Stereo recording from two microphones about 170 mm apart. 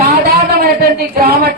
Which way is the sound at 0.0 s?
70° right (ahead or behind).